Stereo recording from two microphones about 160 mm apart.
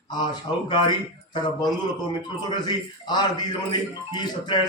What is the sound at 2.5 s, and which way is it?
Speech, 25° left (ahead or behind).